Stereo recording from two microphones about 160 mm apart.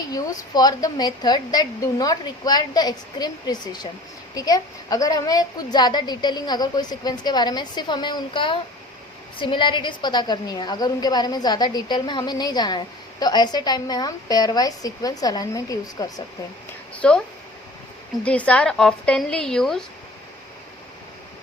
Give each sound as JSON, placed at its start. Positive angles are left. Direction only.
{"t": 0.1, "sound": "a woman's voice", "side_deg": 25}
{"t": 16.9, "sound": "speech", "side_deg": 5}
{"t": 18.3, "sound": "a woman's voice", "side_deg": 10}